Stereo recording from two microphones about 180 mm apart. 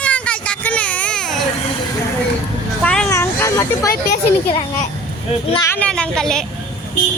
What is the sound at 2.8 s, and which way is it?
Vehicle, 5° left (ahead or behind).